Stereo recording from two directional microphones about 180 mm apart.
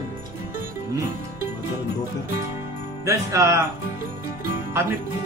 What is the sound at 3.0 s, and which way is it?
Speech, 15° right (ahead or behind).